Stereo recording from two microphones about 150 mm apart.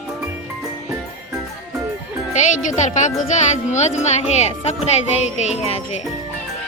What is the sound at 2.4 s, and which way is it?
Speech, 55° left (ahead or behind).